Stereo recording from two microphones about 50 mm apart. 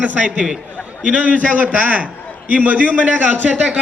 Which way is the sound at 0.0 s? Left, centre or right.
Right.